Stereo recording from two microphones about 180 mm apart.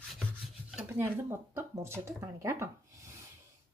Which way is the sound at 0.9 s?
15° right (ahead or behind).